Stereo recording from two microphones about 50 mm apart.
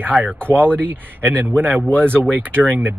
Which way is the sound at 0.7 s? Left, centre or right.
Right.